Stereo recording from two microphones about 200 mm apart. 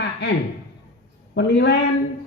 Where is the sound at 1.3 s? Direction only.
60° left (ahead or behind).